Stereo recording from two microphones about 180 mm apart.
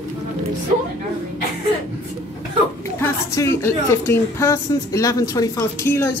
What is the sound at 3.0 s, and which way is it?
A woman's voice, 15° left (ahead or behind).